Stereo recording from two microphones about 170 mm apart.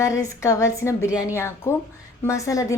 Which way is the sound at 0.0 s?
20° left (ahead or behind).